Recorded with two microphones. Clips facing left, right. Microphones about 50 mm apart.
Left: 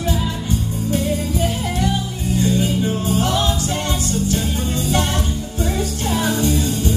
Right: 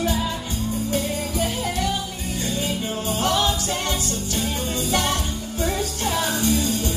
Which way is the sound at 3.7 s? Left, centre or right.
Left.